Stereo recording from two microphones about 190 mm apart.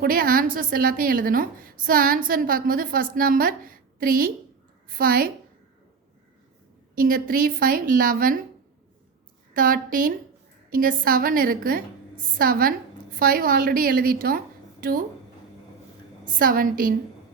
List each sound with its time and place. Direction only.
0.0 s a woman's voice: 50° right (ahead or behind)
6.9 s a woman's voice: 50° right (ahead or behind)
9.5 s a woman's voice: 50° right (ahead or behind)
16.2 s a woman's voice: 50° right (ahead or behind)